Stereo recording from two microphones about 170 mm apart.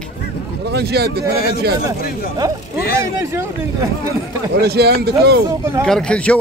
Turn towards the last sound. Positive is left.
turn(degrees=5)  # may be behind; listen again after turning